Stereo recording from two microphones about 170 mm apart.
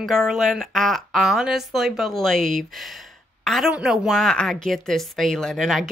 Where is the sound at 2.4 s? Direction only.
55° right (ahead or behind).